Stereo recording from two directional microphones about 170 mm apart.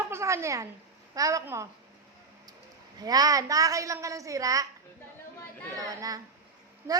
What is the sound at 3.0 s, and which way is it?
A woman's voice, 20° right (ahead or behind).